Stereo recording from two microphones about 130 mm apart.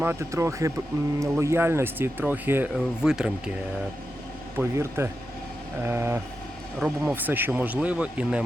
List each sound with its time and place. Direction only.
0.0 s speech: 20° right (ahead or behind)
4.5 s speech: 20° right (ahead or behind)
6.7 s speech: 5° right (ahead or behind)
7.1 s speech: 15° right (ahead or behind)